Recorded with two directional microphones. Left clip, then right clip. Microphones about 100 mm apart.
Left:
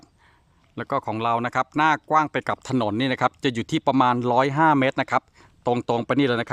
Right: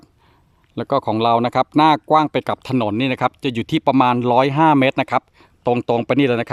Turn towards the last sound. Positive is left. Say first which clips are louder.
# right 5 dB
turn(degrees=-15)  # may be behind; listen again after turning